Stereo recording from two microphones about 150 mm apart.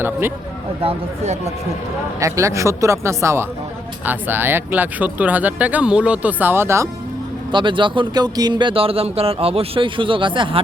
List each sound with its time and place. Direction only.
0.0 s speech: 15° right (ahead or behind)
0.8 s speech: 45° right (ahead or behind)
2.1 s speech: 20° right (ahead or behind)
7.5 s speech: 35° right (ahead or behind)